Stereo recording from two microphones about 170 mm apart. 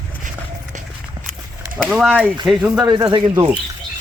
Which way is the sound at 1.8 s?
Centre (ahead or behind).